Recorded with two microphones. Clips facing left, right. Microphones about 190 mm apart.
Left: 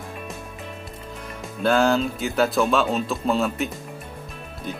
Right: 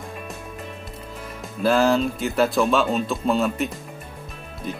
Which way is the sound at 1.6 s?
Centre (ahead or behind).